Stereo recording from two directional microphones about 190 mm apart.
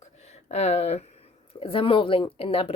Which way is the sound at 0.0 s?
35° left (ahead or behind).